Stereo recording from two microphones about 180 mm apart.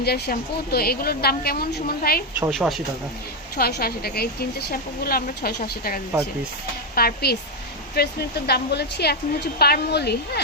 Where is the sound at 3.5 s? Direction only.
55° left (ahead or behind).